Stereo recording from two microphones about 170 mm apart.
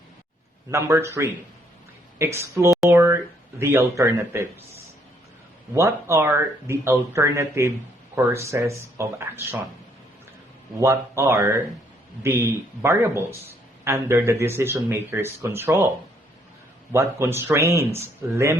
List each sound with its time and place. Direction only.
0.7 s a man's voice: 15° right (ahead or behind)
5.7 s a man's voice: 15° right (ahead or behind)
10.8 s a man's voice: 15° right (ahead or behind)
16.9 s a man's voice: 15° right (ahead or behind)